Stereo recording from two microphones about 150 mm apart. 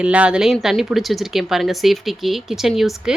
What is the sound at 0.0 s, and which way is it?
Speech, 10° right (ahead or behind).